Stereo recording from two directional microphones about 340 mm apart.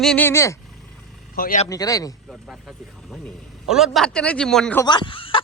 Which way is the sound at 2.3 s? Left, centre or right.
Centre.